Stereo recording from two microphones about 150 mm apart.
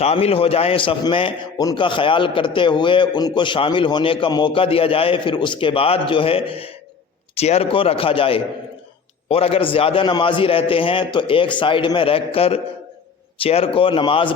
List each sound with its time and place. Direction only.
0.0 s a man's voice: 40° left (ahead or behind)